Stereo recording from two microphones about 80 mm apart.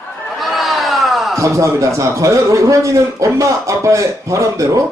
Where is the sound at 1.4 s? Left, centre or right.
Right.